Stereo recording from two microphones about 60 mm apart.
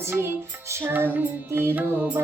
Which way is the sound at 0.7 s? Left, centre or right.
Right.